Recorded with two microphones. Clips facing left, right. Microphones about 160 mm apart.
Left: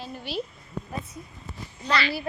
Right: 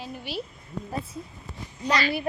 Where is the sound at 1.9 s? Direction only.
45° right (ahead or behind).